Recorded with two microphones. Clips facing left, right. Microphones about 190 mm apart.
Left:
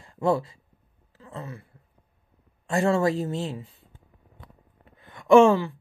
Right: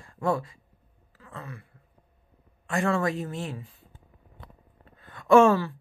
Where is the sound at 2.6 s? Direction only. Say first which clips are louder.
Left 4 dB; 25° left (ahead or behind).